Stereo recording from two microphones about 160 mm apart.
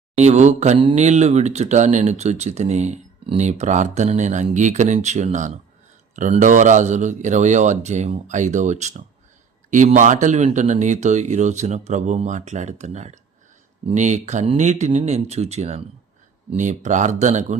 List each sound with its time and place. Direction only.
0.2 s speech: 45° right (ahead or behind)